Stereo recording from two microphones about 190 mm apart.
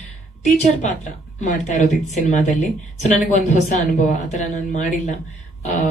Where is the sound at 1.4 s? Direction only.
40° left (ahead or behind).